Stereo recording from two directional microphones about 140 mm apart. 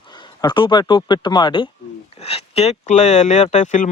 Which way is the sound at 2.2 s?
45° left (ahead or behind).